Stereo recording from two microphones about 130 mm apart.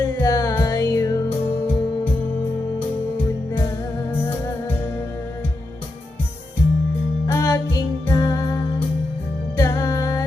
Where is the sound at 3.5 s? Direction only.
20° left (ahead or behind).